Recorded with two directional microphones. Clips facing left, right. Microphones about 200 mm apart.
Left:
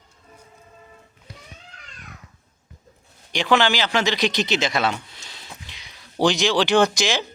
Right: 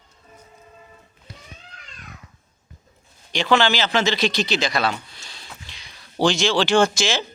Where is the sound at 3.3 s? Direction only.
15° left (ahead or behind).